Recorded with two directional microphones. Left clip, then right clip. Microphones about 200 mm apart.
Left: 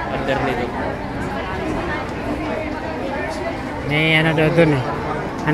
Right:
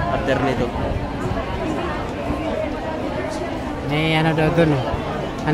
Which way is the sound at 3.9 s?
35° right (ahead or behind).